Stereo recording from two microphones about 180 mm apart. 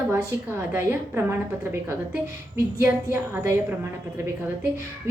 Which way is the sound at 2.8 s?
15° right (ahead or behind).